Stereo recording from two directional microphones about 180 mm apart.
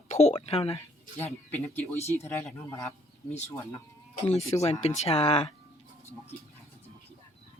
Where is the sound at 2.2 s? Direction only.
15° left (ahead or behind).